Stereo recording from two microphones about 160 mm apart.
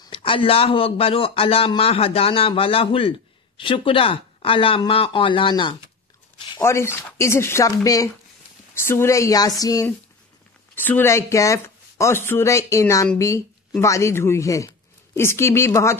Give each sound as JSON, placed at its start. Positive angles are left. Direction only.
{"t": 0.0, "sound": "a man's voice", "side_deg": 35}
{"t": 6.6, "sound": "a woman's voice", "side_deg": 15}